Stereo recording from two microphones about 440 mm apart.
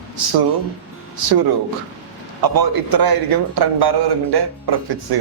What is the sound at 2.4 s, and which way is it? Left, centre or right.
A man's voice, right.